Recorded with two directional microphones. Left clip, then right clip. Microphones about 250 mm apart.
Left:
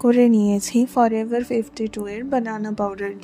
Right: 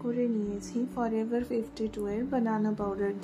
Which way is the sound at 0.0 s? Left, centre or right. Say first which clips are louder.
Left 15 dB; left.